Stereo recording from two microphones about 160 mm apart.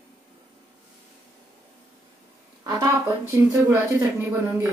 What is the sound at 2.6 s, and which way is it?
A woman's voice, 20° right (ahead or behind).